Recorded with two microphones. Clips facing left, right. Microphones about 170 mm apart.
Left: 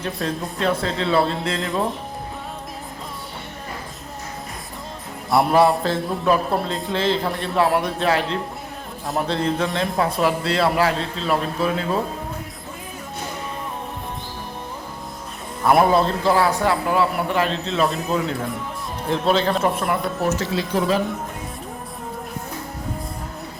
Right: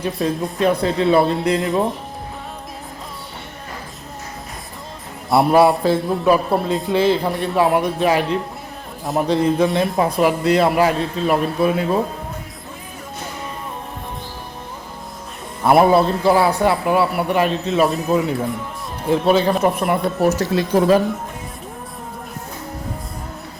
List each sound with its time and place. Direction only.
0.0 s a man's voice: 15° right (ahead or behind)
5.3 s speech: centre (ahead or behind)
5.5 s a man's voice: 15° right (ahead or behind)
6.7 s a man's voice: 20° right (ahead or behind)
15.7 s a man's voice: 15° right (ahead or behind)
20.4 s speech: 50° right (ahead or behind)